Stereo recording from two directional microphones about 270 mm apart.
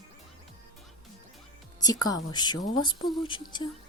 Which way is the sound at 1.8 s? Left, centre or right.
Centre.